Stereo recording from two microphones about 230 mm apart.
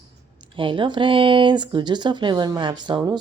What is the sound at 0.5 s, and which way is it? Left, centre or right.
Speech, right.